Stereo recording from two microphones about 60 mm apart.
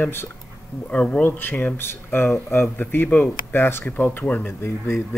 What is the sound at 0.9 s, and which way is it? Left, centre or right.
Speech, centre.